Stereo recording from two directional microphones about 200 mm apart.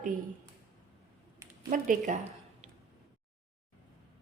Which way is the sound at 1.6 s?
45° right (ahead or behind).